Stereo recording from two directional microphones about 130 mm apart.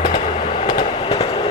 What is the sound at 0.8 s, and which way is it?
Train, 45° left (ahead or behind).